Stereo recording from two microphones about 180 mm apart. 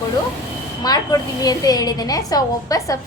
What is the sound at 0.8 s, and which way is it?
A woman's voice, 20° left (ahead or behind).